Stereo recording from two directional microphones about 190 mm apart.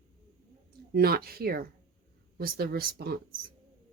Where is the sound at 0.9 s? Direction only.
55° right (ahead or behind).